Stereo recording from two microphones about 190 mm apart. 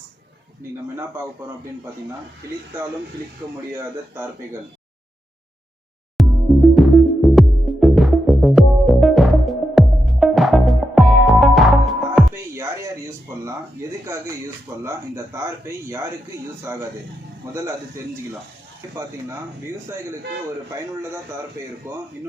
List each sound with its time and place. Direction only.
3.4 s a man's voice: 20° right (ahead or behind)
6.1 s music: centre (ahead or behind)
13.4 s a man's voice: 15° right (ahead or behind)
21.8 s a man's voice: 15° right (ahead or behind)